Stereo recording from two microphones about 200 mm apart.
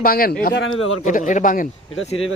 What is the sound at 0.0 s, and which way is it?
Speech, 45° left (ahead or behind).